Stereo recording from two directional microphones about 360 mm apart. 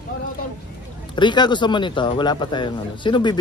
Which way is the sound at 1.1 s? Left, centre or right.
Centre.